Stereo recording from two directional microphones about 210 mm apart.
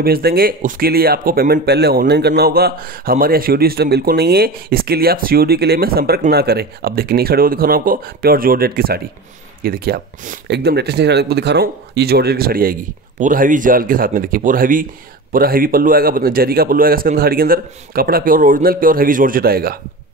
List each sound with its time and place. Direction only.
0.0 s speech: 45° right (ahead or behind)